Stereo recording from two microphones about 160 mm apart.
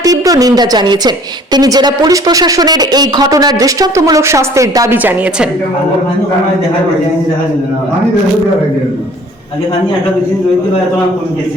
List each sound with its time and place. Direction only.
0.0 s speech: 20° right (ahead or behind)